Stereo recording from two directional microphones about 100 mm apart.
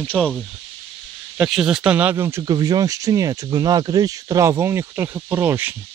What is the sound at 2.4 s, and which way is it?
Speech, 45° right (ahead or behind).